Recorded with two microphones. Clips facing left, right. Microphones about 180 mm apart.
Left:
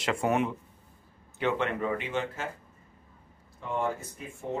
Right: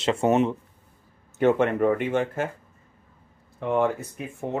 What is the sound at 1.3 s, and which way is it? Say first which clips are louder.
Speech: right 8 dB; 50° right (ahead or behind).